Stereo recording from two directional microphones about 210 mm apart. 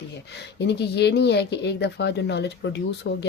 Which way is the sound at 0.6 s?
55° left (ahead or behind).